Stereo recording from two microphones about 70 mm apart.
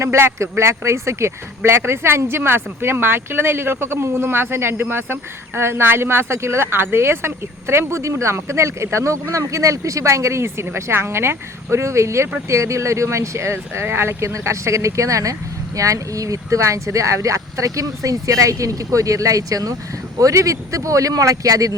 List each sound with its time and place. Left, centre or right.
0.0 s speech: right